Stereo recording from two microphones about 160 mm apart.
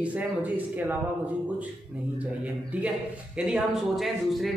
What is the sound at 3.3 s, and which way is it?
Speech, centre (ahead or behind).